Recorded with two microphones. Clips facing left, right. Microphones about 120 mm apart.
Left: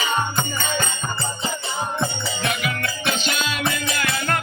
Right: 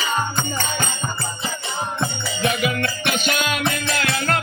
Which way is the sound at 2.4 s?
20° right (ahead or behind).